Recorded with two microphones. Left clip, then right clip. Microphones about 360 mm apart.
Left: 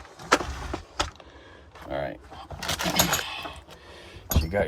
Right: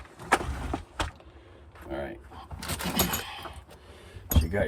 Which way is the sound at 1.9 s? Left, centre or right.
Left.